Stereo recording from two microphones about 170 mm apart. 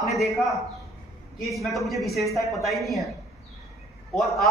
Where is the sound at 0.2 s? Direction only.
Centre (ahead or behind).